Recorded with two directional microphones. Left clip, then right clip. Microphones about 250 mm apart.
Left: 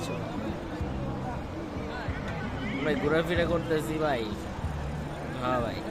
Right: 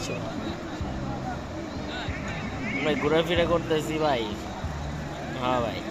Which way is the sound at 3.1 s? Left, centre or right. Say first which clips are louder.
Right 4 dB; centre.